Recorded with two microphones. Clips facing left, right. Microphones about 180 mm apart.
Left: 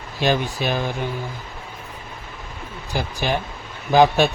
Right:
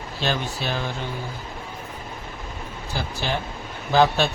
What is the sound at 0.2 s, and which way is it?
Speech, 15° left (ahead or behind).